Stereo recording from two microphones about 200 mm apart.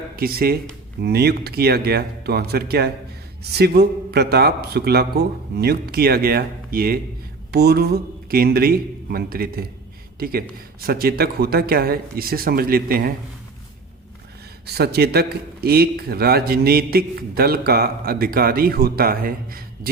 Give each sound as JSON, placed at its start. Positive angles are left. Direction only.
{"t": 0.2, "sound": "a man's voice", "side_deg": -50}
{"t": 14.7, "sound": "speech", "side_deg": -55}